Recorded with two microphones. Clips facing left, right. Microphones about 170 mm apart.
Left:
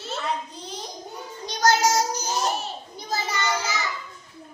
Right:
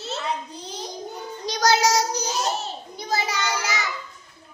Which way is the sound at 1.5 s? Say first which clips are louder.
Right 1 dB; 80° right.